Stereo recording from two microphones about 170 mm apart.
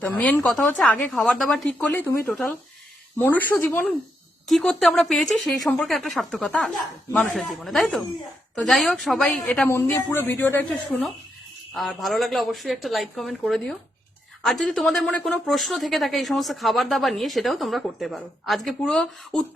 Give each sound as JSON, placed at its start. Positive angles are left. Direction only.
{"t": 0.0, "sound": "speech", "side_deg": 10}
{"t": 3.2, "sound": "a man's voice", "side_deg": 10}
{"t": 9.6, "sound": "a man's voice", "side_deg": 15}
{"t": 10.7, "sound": "speech", "side_deg": 0}